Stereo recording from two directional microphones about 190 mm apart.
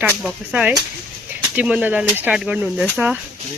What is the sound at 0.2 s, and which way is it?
Speech, 5° right (ahead or behind).